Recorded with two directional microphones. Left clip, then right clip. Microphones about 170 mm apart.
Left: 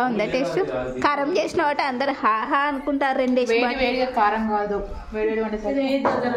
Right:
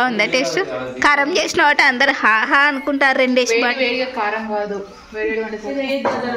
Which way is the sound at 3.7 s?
70° left (ahead or behind).